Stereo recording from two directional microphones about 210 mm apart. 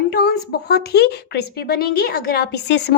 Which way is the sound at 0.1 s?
50° left (ahead or behind).